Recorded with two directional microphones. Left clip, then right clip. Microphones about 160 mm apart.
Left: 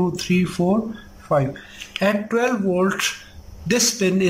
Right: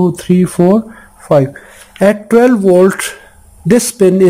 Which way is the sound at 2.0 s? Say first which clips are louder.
Right 11 dB; 60° right (ahead or behind).